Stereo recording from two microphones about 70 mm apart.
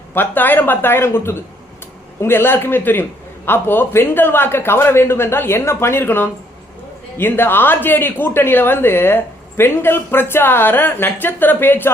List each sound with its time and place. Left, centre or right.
0.1 s speech: left